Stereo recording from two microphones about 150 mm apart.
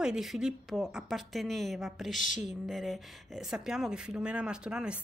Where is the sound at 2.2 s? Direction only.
55° left (ahead or behind).